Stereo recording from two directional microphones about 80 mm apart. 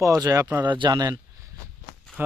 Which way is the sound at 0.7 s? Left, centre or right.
Right.